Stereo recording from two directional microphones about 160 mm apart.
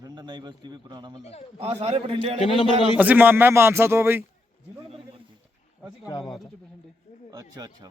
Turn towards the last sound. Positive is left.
turn(degrees=-25)  # may be behind; listen again after turning